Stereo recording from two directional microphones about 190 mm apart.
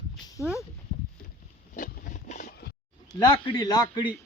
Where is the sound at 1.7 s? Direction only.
45° left (ahead or behind).